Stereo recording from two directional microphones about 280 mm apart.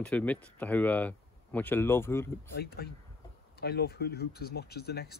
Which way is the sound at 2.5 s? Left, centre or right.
Left.